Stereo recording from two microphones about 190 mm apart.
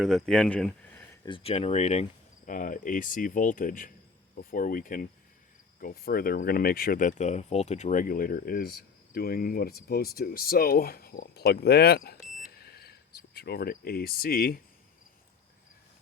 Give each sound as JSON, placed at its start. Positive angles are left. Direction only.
{"t": 0.0, "sound": "speech", "side_deg": 0}
{"t": 1.2, "sound": "speech", "side_deg": 30}
{"t": 12.4, "sound": "a sound", "side_deg": 55}